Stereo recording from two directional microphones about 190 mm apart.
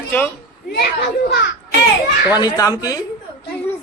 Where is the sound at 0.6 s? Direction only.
60° left (ahead or behind).